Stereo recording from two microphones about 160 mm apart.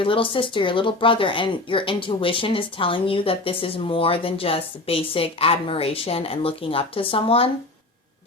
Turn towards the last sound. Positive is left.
turn(degrees=35)  # may be behind; listen again after turning